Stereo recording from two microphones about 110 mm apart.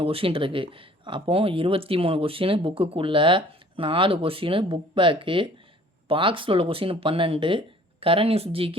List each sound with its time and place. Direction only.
0.0 s speech: 55° right (ahead or behind)